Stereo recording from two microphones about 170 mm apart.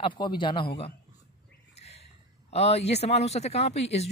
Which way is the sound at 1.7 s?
40° left (ahead or behind).